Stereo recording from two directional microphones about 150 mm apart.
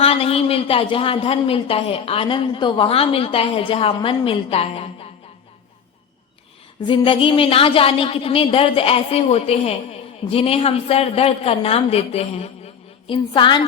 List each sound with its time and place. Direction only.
0.0 s speech: 40° left (ahead or behind)
6.8 s speech: 35° left (ahead or behind)